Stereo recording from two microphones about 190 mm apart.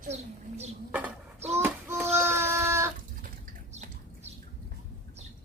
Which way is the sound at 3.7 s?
35° right (ahead or behind).